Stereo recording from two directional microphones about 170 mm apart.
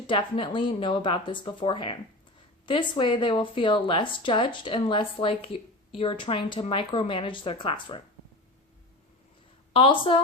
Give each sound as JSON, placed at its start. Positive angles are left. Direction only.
{"t": 0.1, "sound": "speech", "side_deg": 30}
{"t": 9.7, "sound": "speech", "side_deg": 30}